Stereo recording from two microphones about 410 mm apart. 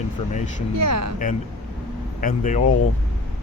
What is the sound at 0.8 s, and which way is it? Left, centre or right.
Speech, right.